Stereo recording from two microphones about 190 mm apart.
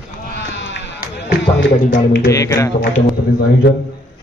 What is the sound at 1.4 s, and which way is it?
Speech, 60° left (ahead or behind).